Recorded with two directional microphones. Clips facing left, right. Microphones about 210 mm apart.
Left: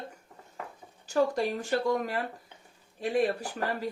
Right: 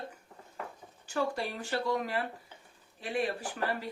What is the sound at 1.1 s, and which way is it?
Speech, 40° left (ahead or behind).